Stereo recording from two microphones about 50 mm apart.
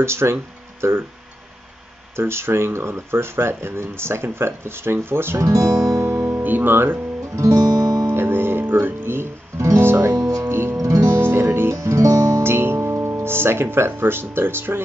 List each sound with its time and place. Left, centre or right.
0.0 s speech: right
2.1 s speech: right
5.4 s guitar: right
6.3 s speech: right
7.3 s music: right
8.1 s music: right
11.7 s music: right
12.4 s speech: right